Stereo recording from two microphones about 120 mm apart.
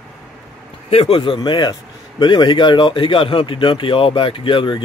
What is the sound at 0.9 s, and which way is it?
A man's voice, 50° left (ahead or behind).